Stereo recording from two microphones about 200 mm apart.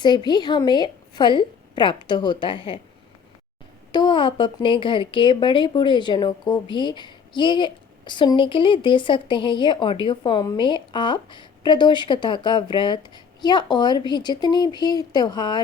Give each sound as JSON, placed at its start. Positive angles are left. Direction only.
{"t": 0.3, "sound": "speech", "side_deg": 20}
{"t": 3.9, "sound": "speech", "side_deg": 25}